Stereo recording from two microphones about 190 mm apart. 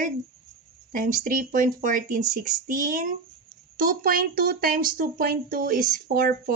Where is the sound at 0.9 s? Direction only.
45° right (ahead or behind).